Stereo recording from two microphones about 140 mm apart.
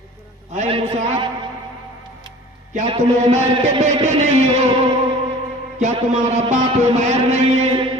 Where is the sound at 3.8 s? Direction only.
55° right (ahead or behind).